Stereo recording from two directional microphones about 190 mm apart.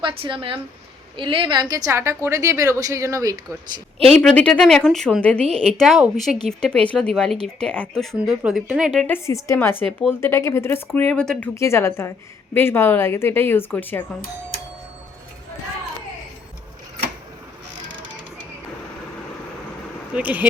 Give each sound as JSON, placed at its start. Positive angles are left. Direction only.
{"t": 0.0, "sound": "a woman's voice", "side_deg": -25}
{"t": 4.1, "sound": "speech", "side_deg": 5}
{"t": 9.1, "sound": "a woman's voice", "side_deg": 15}
{"t": 20.1, "sound": "a woman's voice", "side_deg": -10}